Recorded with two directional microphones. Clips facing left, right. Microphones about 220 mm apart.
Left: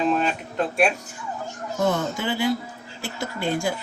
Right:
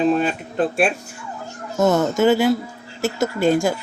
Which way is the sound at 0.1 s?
35° right (ahead or behind).